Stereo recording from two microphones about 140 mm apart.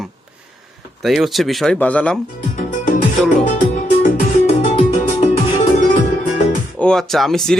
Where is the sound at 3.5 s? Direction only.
60° left (ahead or behind).